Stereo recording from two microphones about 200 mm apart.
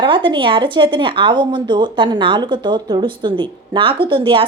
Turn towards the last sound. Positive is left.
turn(degrees=-25)  # may be behind; listen again after turning